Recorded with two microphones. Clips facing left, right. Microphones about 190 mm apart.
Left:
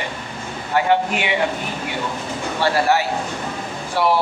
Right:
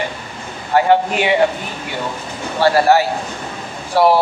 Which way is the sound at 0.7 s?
40° right (ahead or behind).